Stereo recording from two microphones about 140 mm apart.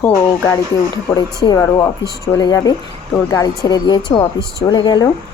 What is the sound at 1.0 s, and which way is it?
Speech, 30° left (ahead or behind).